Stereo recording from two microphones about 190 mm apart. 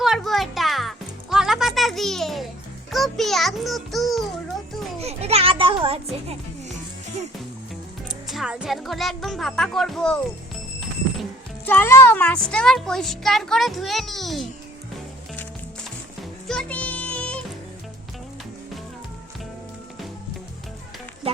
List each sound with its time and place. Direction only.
0.0 s music: centre (ahead or behind)
4.9 s a child's voice: 35° right (ahead or behind)
8.3 s speech: 5° right (ahead or behind)
16.5 s music: 5° left (ahead or behind)